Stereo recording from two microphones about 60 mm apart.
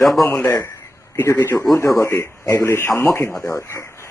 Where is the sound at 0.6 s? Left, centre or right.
Left.